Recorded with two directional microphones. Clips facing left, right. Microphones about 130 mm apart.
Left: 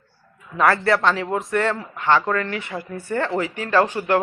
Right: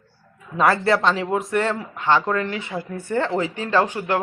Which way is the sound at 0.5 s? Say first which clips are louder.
Even; 20° right (ahead or behind).